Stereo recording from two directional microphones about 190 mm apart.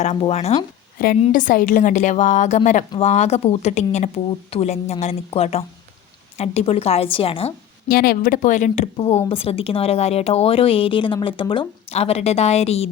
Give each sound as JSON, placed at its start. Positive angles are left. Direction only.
{"t": 0.0, "sound": "speech", "side_deg": 35}
{"t": 1.2, "sound": "speech", "side_deg": 45}
{"t": 7.9, "sound": "speech", "side_deg": 50}